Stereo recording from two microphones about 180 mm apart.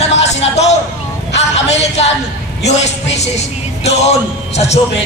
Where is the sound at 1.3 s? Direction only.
35° left (ahead or behind).